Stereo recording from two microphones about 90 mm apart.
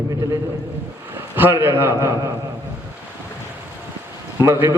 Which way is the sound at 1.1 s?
25° right (ahead or behind).